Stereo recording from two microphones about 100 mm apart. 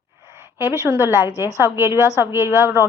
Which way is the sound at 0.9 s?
30° right (ahead or behind).